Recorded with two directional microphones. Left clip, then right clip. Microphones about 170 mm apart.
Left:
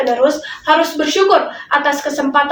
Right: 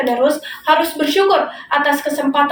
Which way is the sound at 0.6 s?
15° left (ahead or behind).